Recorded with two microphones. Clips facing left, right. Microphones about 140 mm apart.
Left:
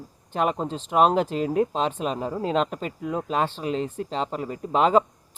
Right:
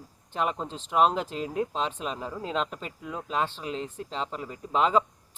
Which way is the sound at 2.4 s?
55° left (ahead or behind).